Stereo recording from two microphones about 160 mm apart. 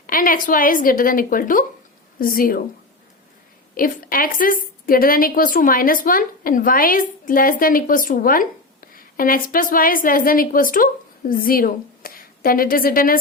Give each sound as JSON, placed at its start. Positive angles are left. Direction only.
{"t": 0.1, "sound": "a woman's voice", "side_deg": 60}
{"t": 3.8, "sound": "a woman's voice", "side_deg": 60}